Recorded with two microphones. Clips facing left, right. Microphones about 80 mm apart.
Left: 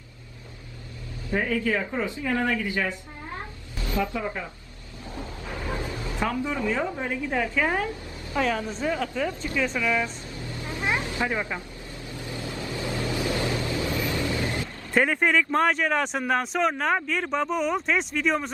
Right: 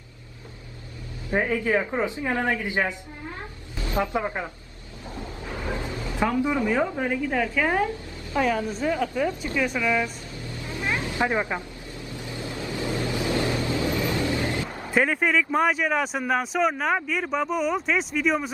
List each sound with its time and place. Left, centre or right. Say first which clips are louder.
1.3 s a woman's voice: right 2 dB; right
5.6 s a woman's voice: right 1 dB; right
7.7 s a sound: right 3 dB; right
8.4 s speech: right 2 dB; centre
10.3 s vehicle: even; left
11.1 s a woman's voice: right 3 dB; right
12.0 s vehicle: even; right
14.8 s speech: even; centre